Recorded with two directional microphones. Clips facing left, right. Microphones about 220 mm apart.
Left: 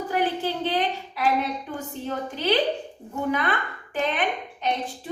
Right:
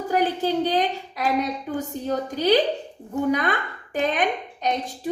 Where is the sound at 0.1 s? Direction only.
40° right (ahead or behind).